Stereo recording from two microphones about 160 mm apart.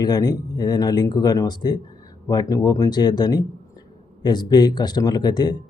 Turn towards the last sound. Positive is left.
turn(degrees=25)  # may be behind; listen again after turning